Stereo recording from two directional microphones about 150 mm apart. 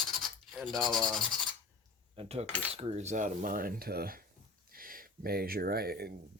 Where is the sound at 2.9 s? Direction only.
50° right (ahead or behind); by 4.2 s 85° right.